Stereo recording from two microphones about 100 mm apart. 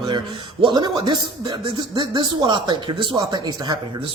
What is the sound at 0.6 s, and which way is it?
A man's voice, 45° right (ahead or behind).